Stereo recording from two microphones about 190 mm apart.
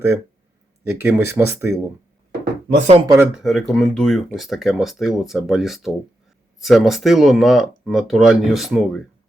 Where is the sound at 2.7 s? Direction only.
35° right (ahead or behind).